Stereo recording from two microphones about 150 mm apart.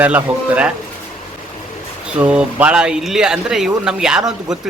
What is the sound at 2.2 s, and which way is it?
A man's voice, 10° right (ahead or behind).